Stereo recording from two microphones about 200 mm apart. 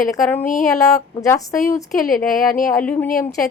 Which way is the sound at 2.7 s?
10° left (ahead or behind).